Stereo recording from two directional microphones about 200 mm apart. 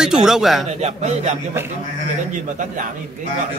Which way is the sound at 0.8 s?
30° right (ahead or behind).